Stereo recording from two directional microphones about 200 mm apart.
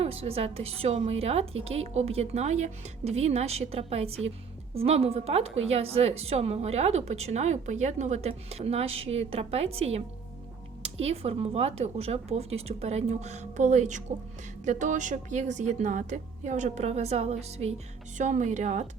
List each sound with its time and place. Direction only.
0.0 s a woman's voice: 30° right (ahead or behind)
11.0 s a woman's voice: 30° right (ahead or behind)